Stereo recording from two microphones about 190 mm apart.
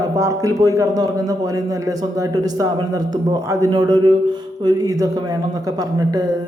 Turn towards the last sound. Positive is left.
turn(degrees=-20)  # may be behind; listen again after turning